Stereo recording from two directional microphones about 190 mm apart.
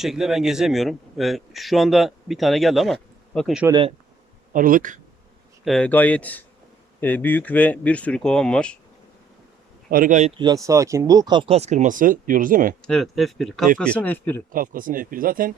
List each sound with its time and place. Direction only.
0.0 s a man's voice: centre (ahead or behind)
3.7 s speech: 25° right (ahead or behind)
4.5 s speech: 45° right (ahead or behind)
5.6 s speech: 5° left (ahead or behind)
9.9 s speech: 45° right (ahead or behind)
10.4 s speech: 15° right (ahead or behind); by 12.7 s 45° right (ahead or behind)
12.8 s a man's voice: centre (ahead or behind)
14.5 s speech: 45° right (ahead or behind)